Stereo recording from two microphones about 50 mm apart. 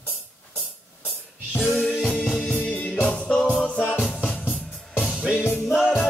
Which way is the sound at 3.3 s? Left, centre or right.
Centre.